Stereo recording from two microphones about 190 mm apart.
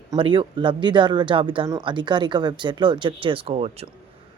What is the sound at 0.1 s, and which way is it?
Speech, 25° right (ahead or behind).